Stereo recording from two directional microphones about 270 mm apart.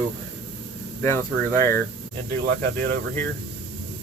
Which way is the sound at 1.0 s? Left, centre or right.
Centre.